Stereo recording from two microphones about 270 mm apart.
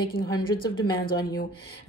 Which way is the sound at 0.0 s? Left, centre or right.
Left.